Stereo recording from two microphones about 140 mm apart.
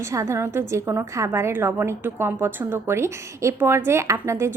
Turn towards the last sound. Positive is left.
turn(degrees=-20)  # may be behind; listen again after turning